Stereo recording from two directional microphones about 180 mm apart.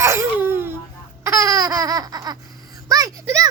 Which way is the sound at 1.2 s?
15° right (ahead or behind).